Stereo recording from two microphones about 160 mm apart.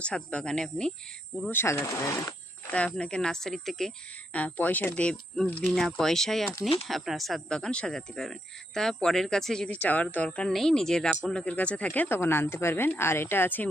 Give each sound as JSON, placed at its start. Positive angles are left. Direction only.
{"t": 0.0, "sound": "a woman's voice", "side_deg": 5}
{"t": 2.7, "sound": "a woman's voice", "side_deg": 5}